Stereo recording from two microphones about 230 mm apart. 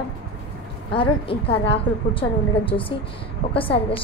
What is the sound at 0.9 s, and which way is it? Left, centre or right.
A woman's voice, left.